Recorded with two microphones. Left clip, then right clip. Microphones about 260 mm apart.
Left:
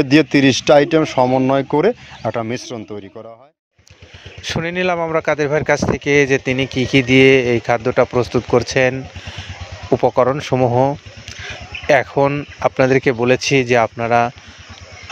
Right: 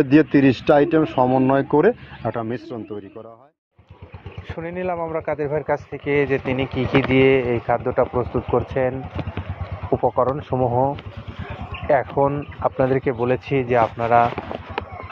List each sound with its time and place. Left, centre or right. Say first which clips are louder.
0.0 s speech: left 3 dB; left
4.6 s speech: left 7 dB; left